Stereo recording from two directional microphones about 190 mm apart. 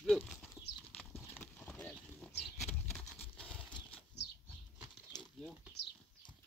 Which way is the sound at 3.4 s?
5° left (ahead or behind).